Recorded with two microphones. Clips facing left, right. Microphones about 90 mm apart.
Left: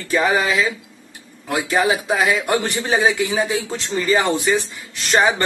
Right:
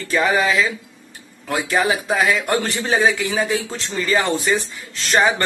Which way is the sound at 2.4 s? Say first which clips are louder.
Left 1 dB; 15° left (ahead or behind).